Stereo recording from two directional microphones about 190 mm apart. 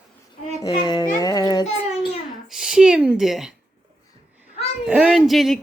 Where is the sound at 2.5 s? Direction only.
5° right (ahead or behind).